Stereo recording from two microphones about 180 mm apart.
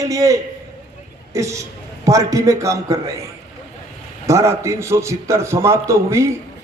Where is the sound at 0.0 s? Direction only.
20° right (ahead or behind).